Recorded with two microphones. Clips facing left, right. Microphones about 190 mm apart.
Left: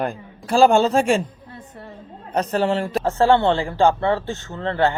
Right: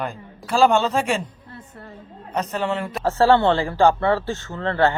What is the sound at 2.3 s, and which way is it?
Speech, 35° left (ahead or behind).